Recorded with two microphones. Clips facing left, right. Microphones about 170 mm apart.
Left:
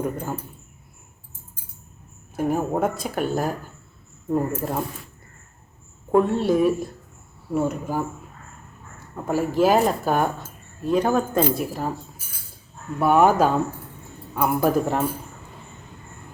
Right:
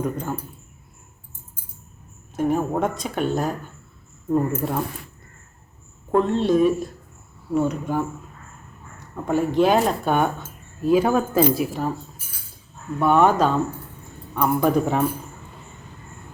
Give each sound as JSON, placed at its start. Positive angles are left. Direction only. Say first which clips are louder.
{"t": 0.0, "sound": "speech", "louder": "right 1 dB", "side_deg": 5}
{"t": 2.3, "sound": "speech", "louder": "right 1 dB", "side_deg": 10}
{"t": 6.1, "sound": "speech", "louder": "even", "side_deg": 10}
{"t": 9.2, "sound": "speech", "louder": "right 1 dB", "side_deg": 5}
{"t": 13.0, "sound": "speech", "louder": "even", "side_deg": 10}